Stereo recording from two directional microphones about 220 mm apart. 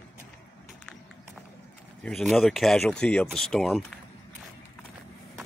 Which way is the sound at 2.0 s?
Centre (ahead or behind).